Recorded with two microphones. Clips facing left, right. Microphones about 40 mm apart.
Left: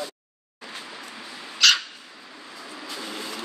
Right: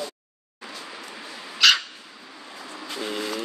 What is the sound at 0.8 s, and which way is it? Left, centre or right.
Dog, centre.